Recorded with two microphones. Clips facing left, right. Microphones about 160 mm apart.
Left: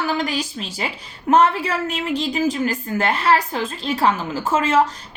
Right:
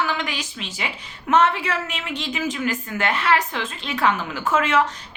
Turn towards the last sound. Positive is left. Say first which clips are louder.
# left 2 dB
turn(degrees=30)  # may be behind; listen again after turning